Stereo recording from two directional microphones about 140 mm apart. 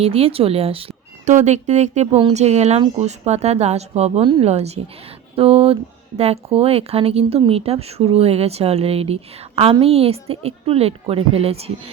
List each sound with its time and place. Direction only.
0.0 s speech: 45° right (ahead or behind)
1.2 s speech: 60° right (ahead or behind)